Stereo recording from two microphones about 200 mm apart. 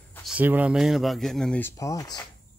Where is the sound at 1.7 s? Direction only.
15° left (ahead or behind).